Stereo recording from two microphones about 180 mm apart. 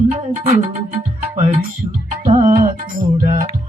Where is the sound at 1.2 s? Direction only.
40° right (ahead or behind).